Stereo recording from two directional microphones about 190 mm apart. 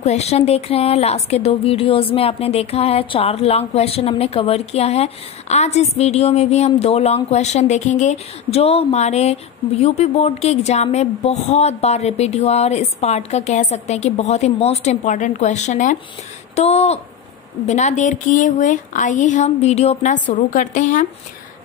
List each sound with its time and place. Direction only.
0.0 s speech: 35° left (ahead or behind)